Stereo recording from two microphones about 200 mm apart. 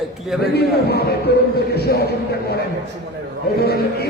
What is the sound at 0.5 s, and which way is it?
A man's voice, 55° left (ahead or behind).